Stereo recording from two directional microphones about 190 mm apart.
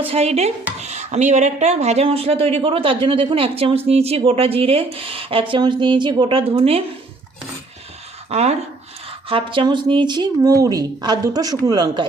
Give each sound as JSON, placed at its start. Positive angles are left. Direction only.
{"t": 0.1, "sound": "stir", "side_deg": -35}
{"t": 0.8, "sound": "speech", "side_deg": -35}
{"t": 8.3, "sound": "speech", "side_deg": -35}